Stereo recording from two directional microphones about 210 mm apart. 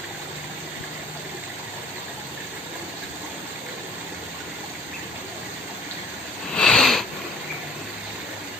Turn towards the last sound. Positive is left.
turn(degrees=0)  # may be behind; listen again after turning